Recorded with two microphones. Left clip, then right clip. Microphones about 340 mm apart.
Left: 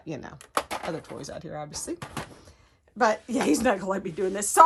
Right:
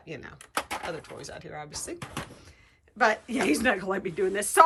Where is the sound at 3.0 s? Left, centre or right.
Centre.